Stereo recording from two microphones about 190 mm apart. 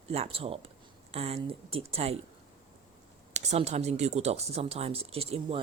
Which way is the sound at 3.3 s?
35° right (ahead or behind).